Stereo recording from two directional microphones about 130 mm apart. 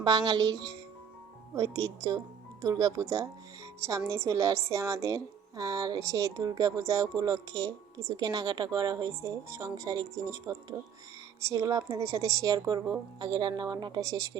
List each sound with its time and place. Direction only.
0.0 s a woman's voice: 30° right (ahead or behind)